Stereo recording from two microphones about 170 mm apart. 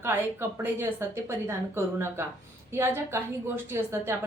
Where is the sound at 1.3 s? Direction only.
15° right (ahead or behind).